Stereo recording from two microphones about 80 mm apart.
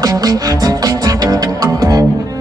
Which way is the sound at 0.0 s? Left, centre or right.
Right.